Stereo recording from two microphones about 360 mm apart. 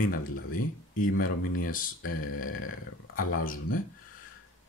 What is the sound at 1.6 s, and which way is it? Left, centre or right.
Speech, left.